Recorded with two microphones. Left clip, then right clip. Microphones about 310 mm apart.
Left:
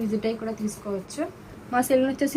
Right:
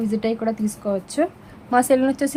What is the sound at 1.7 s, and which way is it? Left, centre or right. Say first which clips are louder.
Speech: right 5 dB; centre.